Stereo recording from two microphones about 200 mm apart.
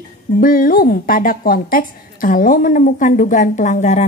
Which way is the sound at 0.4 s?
45° left (ahead or behind).